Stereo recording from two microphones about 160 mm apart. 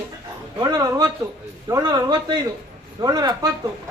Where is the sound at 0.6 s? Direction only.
25° right (ahead or behind).